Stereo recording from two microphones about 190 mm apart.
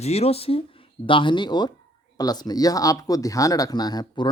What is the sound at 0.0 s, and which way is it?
Speech, 35° left (ahead or behind).